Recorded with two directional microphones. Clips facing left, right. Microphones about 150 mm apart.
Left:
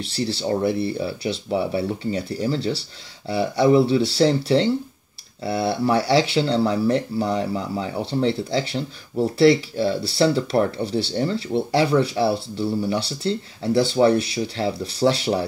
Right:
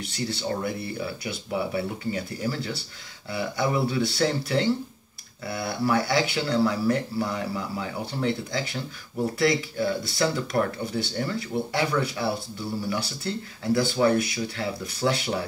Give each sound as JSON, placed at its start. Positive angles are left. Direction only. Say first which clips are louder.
{"t": 0.0, "sound": "speech", "louder": "left 5 dB", "side_deg": 30}